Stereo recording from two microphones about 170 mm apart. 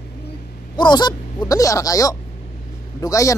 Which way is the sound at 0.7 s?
25° left (ahead or behind).